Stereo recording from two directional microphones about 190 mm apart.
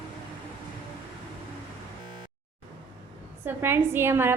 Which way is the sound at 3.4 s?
10° right (ahead or behind).